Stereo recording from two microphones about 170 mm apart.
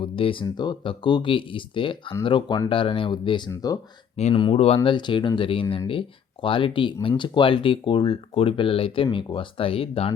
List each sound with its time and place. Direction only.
0.0 s speech: 30° left (ahead or behind)
4.2 s speech: 35° left (ahead or behind)